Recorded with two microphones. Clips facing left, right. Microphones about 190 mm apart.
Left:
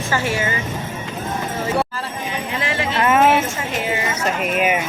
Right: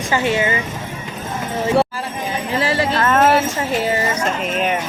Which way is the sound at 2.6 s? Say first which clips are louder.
Right 5 dB; 35° right (ahead or behind).